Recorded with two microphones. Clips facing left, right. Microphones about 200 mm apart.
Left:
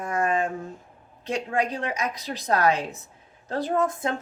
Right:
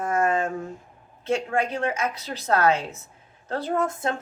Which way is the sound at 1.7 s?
15° left (ahead or behind).